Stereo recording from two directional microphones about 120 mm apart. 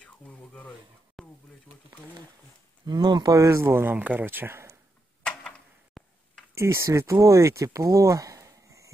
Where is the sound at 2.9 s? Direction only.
35° right (ahead or behind); by 4.7 s 20° right (ahead or behind).